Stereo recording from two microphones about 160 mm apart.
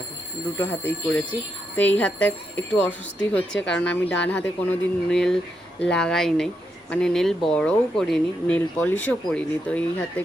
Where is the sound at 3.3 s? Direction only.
5° left (ahead or behind).